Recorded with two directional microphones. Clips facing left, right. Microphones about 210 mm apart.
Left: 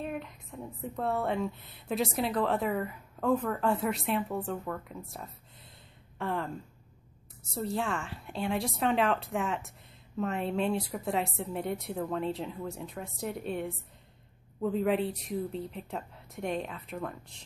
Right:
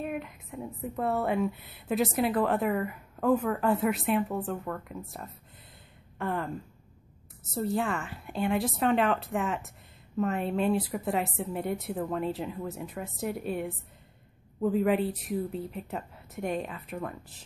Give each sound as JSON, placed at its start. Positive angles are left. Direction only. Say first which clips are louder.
{"t": 0.0, "sound": "a woman's voice", "louder": "right 2 dB", "side_deg": -5}
{"t": 7.5, "sound": "a woman's voice", "louder": "right 3 dB", "side_deg": 0}